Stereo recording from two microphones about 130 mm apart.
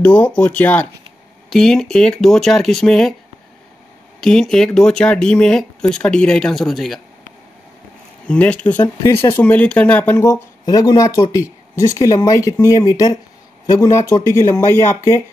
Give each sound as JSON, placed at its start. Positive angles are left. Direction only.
{"t": 0.0, "sound": "speech", "side_deg": 10}
{"t": 4.2, "sound": "speech", "side_deg": 5}
{"t": 8.3, "sound": "speech", "side_deg": 10}